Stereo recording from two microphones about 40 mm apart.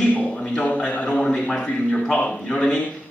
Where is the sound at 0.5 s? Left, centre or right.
Left.